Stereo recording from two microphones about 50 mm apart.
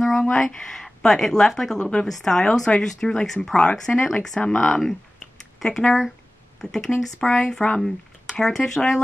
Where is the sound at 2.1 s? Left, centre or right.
Centre.